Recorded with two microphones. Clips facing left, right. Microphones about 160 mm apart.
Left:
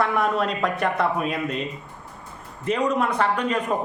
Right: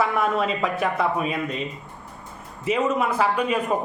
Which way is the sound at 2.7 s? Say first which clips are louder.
Even; 5° right (ahead or behind).